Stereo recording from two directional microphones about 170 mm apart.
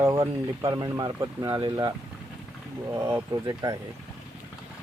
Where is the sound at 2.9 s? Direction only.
15° right (ahead or behind).